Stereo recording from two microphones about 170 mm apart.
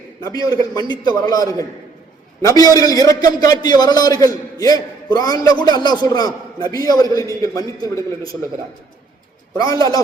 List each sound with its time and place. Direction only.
0.3 s a man's voice: 20° left (ahead or behind)
9.6 s a man's voice: 20° left (ahead or behind)